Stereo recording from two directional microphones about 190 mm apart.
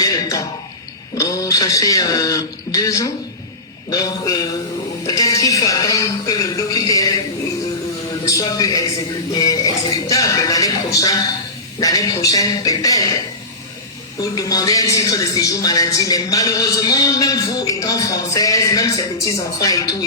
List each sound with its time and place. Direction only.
0.0 s a sound: 20° left (ahead or behind)
1.1 s speech: 15° left (ahead or behind)
8.2 s speech: 20° left (ahead or behind)
14.3 s speech: 20° left (ahead or behind)